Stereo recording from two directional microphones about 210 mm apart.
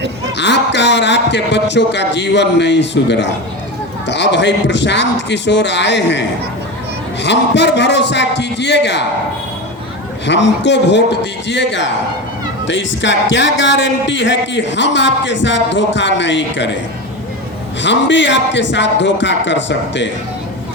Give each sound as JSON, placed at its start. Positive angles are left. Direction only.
{"t": 0.3, "sound": "a man's voice", "side_deg": 55}
{"t": 10.2, "sound": "a man's voice", "side_deg": 55}
{"t": 17.8, "sound": "a man's voice", "side_deg": 60}